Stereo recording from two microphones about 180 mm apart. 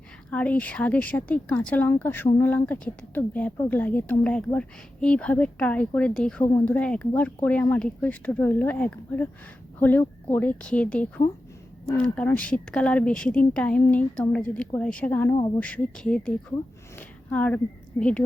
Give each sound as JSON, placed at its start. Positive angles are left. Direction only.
{"t": 0.3, "sound": "speech", "side_deg": 5}